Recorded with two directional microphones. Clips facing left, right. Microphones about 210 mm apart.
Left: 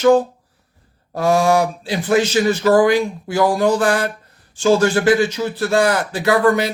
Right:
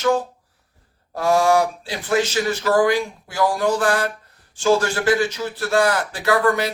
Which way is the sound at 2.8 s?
20° left (ahead or behind).